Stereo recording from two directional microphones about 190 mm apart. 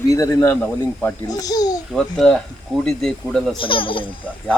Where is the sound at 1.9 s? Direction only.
5° left (ahead or behind).